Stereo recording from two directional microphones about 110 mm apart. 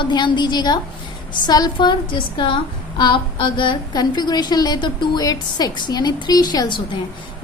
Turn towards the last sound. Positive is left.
turn(degrees=40)  # may be behind; listen again after turning